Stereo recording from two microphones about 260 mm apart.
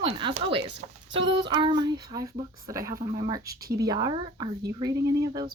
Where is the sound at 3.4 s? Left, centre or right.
Right.